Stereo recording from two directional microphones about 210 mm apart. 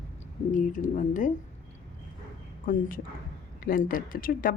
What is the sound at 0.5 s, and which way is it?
Speech, 40° left (ahead or behind).